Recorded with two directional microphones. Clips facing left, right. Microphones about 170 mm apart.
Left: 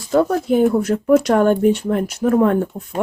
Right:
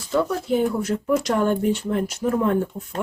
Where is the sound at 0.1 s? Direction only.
50° left (ahead or behind).